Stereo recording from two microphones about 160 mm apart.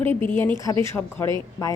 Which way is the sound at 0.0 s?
15° left (ahead or behind).